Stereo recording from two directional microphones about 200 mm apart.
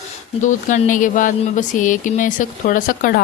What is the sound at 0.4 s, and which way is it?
Speech, 40° left (ahead or behind).